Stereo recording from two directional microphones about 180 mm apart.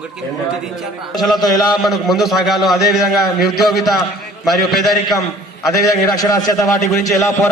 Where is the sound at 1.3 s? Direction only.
20° left (ahead or behind).